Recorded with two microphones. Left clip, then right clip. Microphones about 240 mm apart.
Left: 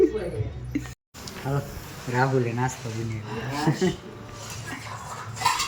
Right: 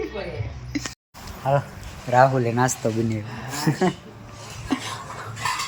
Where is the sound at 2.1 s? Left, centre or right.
Centre.